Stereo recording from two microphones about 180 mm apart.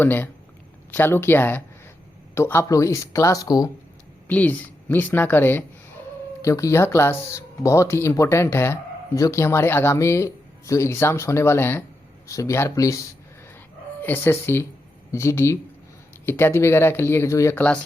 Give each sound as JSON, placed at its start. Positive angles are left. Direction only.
{"t": 0.0, "sound": "speech", "side_deg": 10}
{"t": 4.3, "sound": "speech", "side_deg": 10}
{"t": 14.0, "sound": "speech", "side_deg": 10}